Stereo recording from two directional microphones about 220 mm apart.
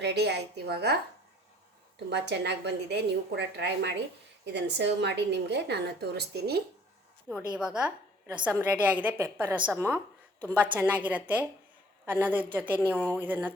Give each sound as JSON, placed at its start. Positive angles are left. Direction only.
{"t": 0.0, "sound": "a woman's voice", "side_deg": -50}
{"t": 2.0, "sound": "a woman's voice", "side_deg": -50}
{"t": 7.3, "sound": "a woman's voice", "side_deg": -10}